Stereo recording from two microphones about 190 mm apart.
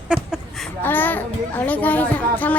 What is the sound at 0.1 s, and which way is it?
Speech, centre (ahead or behind).